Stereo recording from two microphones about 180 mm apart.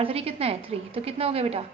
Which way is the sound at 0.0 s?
35° right (ahead or behind).